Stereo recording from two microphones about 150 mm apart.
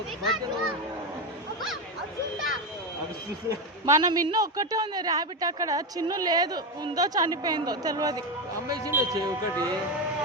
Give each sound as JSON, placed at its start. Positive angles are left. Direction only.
{"t": 3.8, "sound": "a man's voice", "side_deg": -25}